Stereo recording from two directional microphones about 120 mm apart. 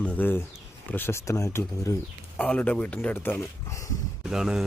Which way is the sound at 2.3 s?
10° left (ahead or behind).